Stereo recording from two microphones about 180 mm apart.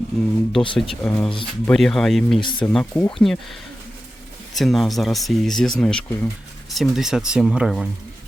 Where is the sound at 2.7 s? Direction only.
5° left (ahead or behind).